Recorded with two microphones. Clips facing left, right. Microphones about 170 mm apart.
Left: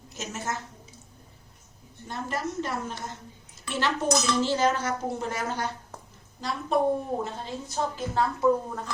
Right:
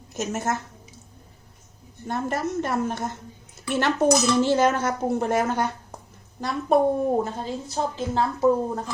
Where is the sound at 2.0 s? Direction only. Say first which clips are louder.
Right 5 dB; 55° right (ahead or behind).